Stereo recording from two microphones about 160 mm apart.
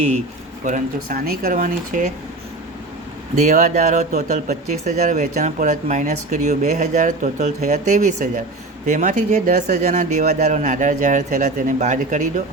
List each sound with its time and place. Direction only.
0.6 s speech: 60° right (ahead or behind)
3.4 s speech: 50° right (ahead or behind)